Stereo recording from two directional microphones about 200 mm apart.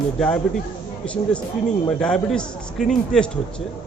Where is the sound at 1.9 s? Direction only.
5° left (ahead or behind).